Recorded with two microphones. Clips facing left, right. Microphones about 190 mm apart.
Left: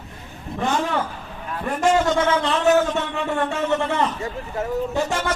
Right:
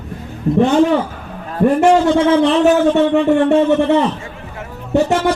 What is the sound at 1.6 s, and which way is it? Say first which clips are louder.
Speech: right 8 dB; 65° right (ahead or behind).